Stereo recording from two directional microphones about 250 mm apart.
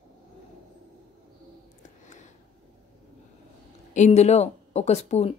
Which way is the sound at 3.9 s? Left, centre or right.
Left.